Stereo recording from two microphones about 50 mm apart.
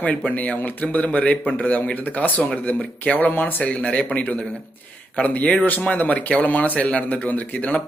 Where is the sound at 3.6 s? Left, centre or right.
Left.